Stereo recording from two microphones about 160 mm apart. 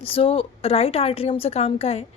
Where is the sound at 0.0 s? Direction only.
35° left (ahead or behind).